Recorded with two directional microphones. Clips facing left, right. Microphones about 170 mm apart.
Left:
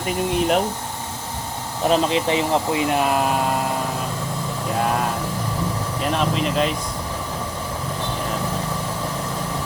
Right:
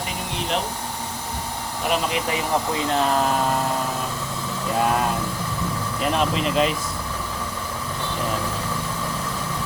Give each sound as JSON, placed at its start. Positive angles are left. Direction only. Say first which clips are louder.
{"t": 1.9, "sound": "speech", "louder": "left 5 dB", "side_deg": 30}
{"t": 6.0, "sound": "speech", "louder": "even", "side_deg": 0}